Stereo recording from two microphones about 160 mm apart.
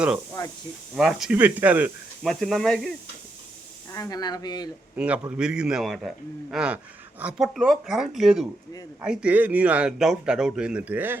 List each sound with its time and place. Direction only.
0.4 s speech: 25° left (ahead or behind)
0.9 s a man's voice: centre (ahead or behind)
2.2 s a man's voice: centre (ahead or behind)
3.9 s speech: 20° left (ahead or behind)
4.9 s a man's voice: 10° right (ahead or behind)